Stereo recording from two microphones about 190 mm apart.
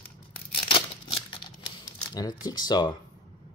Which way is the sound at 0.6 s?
30° left (ahead or behind).